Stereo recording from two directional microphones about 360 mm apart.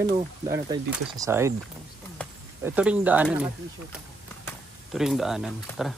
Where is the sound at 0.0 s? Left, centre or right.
Centre.